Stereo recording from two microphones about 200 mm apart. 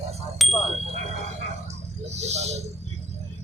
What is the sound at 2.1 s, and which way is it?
Speech, 35° right (ahead or behind).